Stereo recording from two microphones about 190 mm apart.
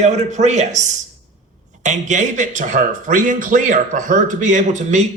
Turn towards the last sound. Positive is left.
turn(degrees=-40)  # may be behind; listen again after turning